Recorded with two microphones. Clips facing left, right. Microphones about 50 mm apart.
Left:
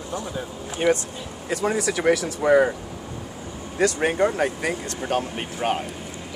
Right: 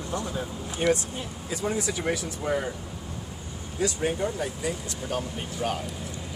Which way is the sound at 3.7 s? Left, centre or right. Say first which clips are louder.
Left 6 dB; left.